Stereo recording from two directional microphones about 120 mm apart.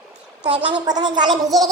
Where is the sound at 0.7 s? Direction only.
35° right (ahead or behind).